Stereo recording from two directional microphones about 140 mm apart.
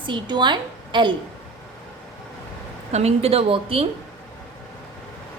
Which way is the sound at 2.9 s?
50° right (ahead or behind).